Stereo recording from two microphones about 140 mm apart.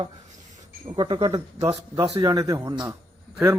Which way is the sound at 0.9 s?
35° right (ahead or behind).